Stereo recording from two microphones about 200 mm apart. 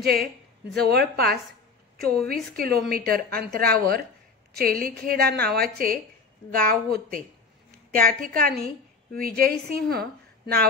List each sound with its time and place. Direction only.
0.0 s a woman's voice: 50° right (ahead or behind)
2.5 s a woman's voice: 50° right (ahead or behind)